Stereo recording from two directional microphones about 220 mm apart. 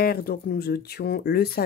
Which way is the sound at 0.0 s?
45° left (ahead or behind).